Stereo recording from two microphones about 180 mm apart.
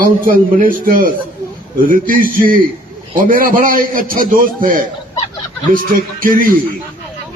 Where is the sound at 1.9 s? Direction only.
50° right (ahead or behind).